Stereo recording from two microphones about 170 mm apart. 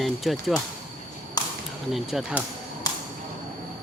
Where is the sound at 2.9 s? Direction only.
20° left (ahead or behind).